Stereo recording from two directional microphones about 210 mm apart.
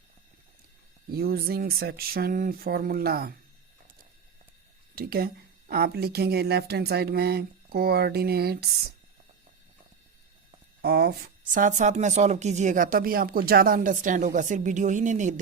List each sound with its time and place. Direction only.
1.1 s speech: 45° right (ahead or behind)
4.9 s speech: 45° right (ahead or behind)
10.8 s a woman's voice: 50° right (ahead or behind)